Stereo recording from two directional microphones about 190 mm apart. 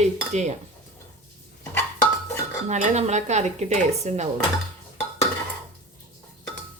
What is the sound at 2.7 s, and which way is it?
Dishes, 35° right (ahead or behind).